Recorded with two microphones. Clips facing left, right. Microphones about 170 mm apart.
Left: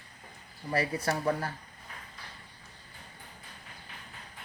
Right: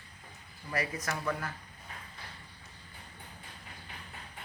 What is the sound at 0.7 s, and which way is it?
Speech, 30° left (ahead or behind).